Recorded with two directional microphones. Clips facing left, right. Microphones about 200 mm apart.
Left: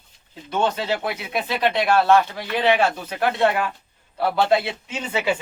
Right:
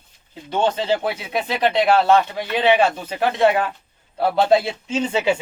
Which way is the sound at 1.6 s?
15° right (ahead or behind).